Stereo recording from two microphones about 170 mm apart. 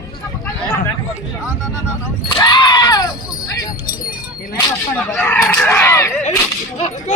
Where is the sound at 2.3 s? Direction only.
25° left (ahead or behind).